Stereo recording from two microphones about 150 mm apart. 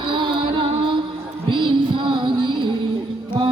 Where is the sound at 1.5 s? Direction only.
35° right (ahead or behind).